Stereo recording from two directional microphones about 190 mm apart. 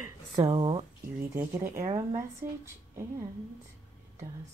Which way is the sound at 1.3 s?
15° right (ahead or behind).